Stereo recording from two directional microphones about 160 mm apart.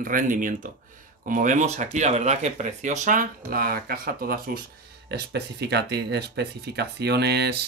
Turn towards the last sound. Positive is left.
turn(degrees=-90)